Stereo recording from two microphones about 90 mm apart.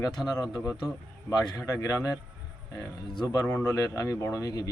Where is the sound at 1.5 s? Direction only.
35° left (ahead or behind).